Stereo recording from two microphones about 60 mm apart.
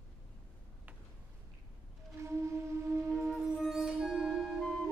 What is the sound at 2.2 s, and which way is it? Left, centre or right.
Music, right.